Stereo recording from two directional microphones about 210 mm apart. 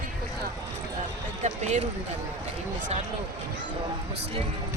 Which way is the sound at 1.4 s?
35° right (ahead or behind).